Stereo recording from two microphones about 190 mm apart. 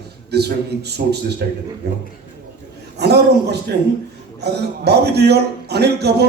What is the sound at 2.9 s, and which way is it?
A man's voice, 60° right (ahead or behind).